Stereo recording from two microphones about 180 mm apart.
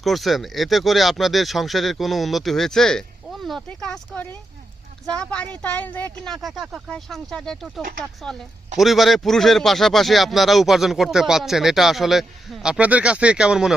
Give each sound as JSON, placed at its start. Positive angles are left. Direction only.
{"t": 0.0, "sound": "speech", "side_deg": 0}